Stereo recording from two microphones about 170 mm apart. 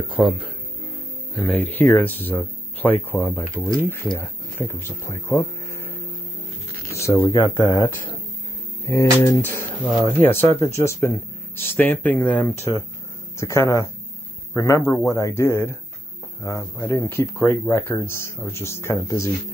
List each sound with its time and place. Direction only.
0.1 s speech: 5° right (ahead or behind); by 5.9 s 15° left (ahead or behind)
6.8 s a sound: 15° left (ahead or behind)
7.6 s speech: 20° left (ahead or behind)